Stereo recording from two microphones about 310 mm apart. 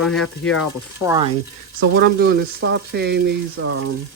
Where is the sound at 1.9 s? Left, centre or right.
Right.